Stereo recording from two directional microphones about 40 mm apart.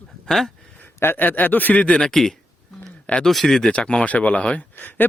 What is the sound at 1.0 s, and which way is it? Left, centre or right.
Speech, left.